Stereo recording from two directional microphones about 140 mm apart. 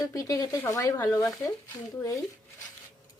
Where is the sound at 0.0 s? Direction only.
25° left (ahead or behind).